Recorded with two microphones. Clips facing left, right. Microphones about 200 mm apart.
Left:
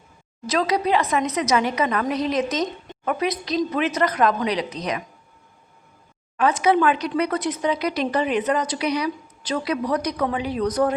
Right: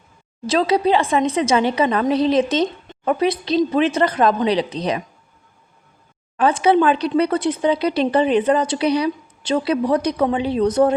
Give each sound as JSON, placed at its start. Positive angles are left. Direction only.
{"t": 0.4, "sound": "speech", "side_deg": -30}
{"t": 6.3, "sound": "speech", "side_deg": -30}